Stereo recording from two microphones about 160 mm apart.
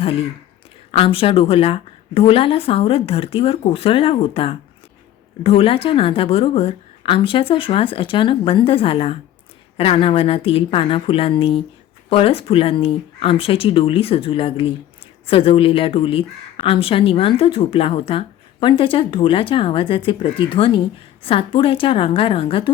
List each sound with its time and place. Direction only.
0.0 s speech: 35° left (ahead or behind)